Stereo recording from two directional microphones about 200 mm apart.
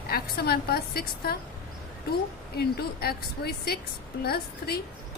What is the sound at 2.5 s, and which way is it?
A woman's voice, 50° left (ahead or behind).